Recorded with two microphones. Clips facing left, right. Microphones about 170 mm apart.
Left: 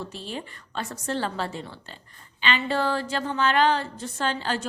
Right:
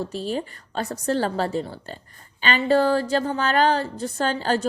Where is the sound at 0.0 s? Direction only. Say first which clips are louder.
Right 8 dB; 40° right (ahead or behind).